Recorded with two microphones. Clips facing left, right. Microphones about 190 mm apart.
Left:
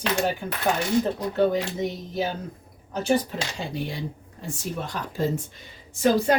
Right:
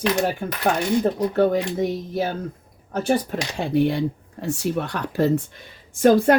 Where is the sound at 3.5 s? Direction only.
60° right (ahead or behind).